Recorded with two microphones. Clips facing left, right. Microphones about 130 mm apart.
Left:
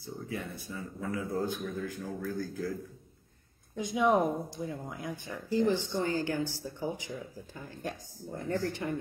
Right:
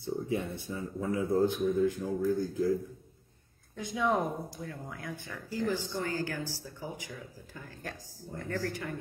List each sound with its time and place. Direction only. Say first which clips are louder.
0.0 s speech: right 6 dB; 25° right (ahead or behind)
3.7 s speech: left 3 dB; 20° left (ahead or behind)